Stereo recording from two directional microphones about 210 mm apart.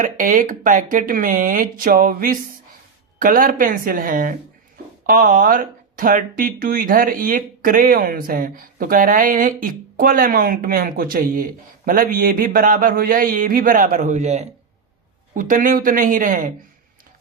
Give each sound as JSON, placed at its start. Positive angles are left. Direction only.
{"t": 0.0, "sound": "speech", "side_deg": -40}